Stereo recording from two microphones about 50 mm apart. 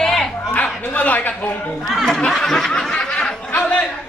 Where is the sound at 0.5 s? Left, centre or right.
Left.